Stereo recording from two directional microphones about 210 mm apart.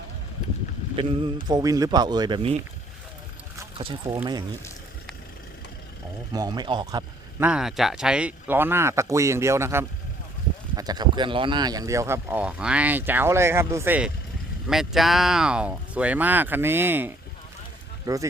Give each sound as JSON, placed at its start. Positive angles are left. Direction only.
{"t": 1.0, "sound": "speech", "side_deg": -25}
{"t": 3.8, "sound": "speech", "side_deg": -25}
{"t": 6.3, "sound": "speech", "side_deg": -20}
{"t": 7.3, "sound": "speech", "side_deg": -5}